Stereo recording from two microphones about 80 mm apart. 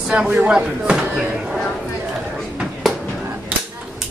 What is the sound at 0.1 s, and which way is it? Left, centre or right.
Speech, centre.